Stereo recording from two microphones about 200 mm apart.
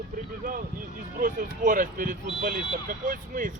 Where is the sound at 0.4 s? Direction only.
40° right (ahead or behind).